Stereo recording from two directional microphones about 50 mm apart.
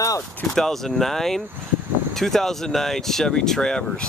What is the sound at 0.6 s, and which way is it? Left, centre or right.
Speech, centre.